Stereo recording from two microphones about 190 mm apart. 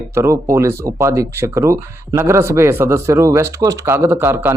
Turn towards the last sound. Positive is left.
turn(degrees=-10)  # may be behind; listen again after turning